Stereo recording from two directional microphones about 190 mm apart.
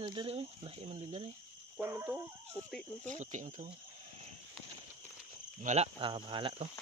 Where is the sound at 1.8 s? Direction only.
10° right (ahead or behind).